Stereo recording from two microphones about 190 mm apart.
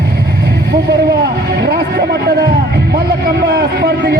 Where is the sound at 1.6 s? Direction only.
55° right (ahead or behind).